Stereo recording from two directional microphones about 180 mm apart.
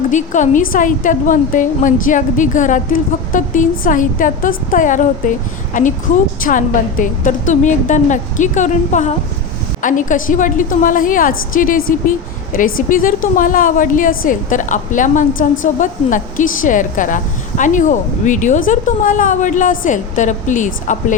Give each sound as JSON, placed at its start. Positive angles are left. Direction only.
{"t": 0.1, "sound": "a woman's voice", "side_deg": 45}